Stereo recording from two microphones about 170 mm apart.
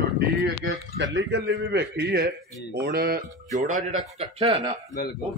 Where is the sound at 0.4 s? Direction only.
85° right; by 3.3 s 60° right (ahead or behind).